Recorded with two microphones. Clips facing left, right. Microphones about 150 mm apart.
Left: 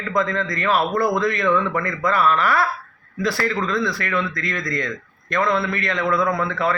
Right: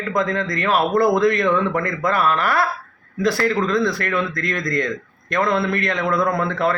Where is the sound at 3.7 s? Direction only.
45° right (ahead or behind).